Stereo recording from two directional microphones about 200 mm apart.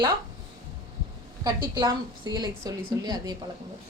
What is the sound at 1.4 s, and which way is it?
A woman's voice, 20° right (ahead or behind).